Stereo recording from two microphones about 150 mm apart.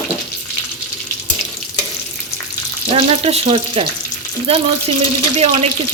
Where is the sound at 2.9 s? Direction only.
40° right (ahead or behind).